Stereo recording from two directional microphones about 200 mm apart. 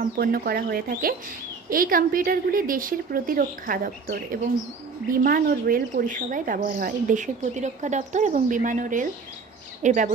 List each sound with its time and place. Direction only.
0.2 s a woman's voice: 45° right (ahead or behind)